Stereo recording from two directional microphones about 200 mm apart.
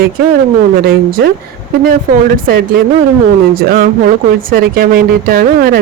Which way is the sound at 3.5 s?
45° right (ahead or behind).